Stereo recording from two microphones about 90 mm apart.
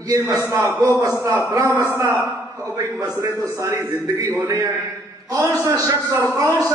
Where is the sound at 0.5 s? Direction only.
30° right (ahead or behind).